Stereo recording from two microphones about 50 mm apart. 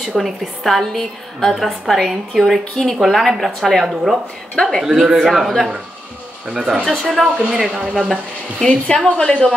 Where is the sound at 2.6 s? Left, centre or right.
Centre.